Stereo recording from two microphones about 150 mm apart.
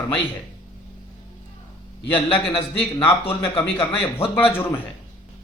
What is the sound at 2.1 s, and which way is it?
Speech, 35° left (ahead or behind).